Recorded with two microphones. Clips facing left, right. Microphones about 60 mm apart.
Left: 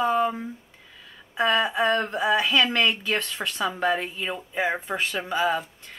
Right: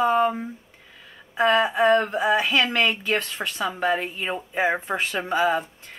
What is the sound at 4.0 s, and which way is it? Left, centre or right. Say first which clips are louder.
Speech: right 2 dB; right.